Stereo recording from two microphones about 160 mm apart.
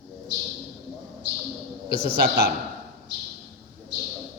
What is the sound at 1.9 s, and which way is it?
Speech, 75° right (ahead or behind).